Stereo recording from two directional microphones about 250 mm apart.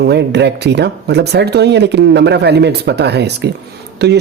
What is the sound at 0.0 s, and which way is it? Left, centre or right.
Speech, right.